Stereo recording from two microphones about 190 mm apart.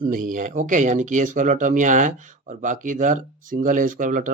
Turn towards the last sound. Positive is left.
turn(degrees=-45)  # may be behind; listen again after turning